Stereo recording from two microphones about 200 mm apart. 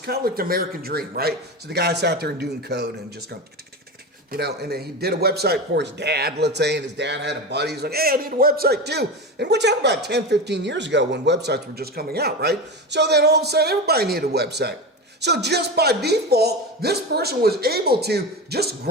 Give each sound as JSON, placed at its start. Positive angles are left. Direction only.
{"t": 0.0, "sound": "speech", "side_deg": -50}
{"t": 4.3, "sound": "a man's voice", "side_deg": -55}